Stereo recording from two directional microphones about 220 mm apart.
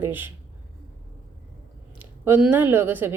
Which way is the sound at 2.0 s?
10° right (ahead or behind).